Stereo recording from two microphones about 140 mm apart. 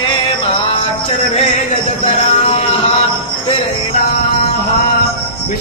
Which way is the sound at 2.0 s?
50° left (ahead or behind).